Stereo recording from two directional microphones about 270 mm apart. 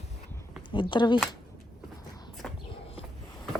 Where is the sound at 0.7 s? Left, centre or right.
Centre.